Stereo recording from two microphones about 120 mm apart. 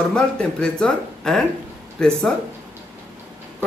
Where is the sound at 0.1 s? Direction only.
5° left (ahead or behind).